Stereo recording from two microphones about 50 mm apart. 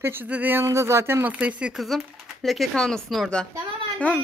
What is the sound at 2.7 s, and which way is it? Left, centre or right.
Speech, centre.